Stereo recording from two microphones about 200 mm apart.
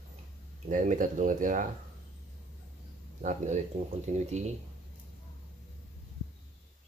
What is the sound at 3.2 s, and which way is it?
Speech, 35° right (ahead or behind).